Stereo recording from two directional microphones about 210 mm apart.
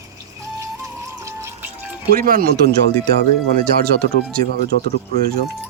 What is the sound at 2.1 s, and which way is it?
Speech, 45° right (ahead or behind).